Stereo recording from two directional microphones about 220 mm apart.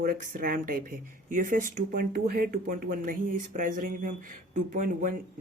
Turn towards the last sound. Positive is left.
turn(degrees=-35)  # may be behind; listen again after turning